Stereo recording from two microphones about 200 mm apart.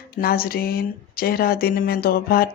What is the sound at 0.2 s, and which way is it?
Speech, 50° left (ahead or behind).